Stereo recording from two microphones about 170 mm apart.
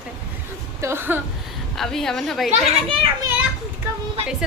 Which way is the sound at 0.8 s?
15° right (ahead or behind).